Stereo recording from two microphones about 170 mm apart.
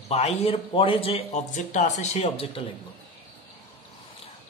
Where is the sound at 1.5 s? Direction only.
45° left (ahead or behind).